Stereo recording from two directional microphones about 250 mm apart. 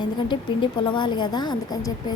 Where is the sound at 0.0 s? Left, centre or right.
Centre.